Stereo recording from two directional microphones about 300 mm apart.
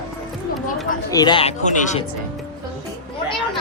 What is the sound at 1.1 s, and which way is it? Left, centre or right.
Speech, centre.